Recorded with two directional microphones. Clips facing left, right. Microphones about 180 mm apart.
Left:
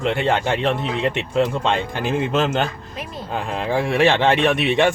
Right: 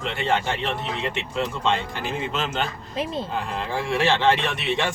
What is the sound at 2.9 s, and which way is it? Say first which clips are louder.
Speech: right 5 dB; 25° right (ahead or behind).